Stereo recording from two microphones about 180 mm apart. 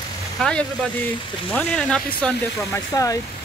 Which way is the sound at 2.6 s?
20° left (ahead or behind).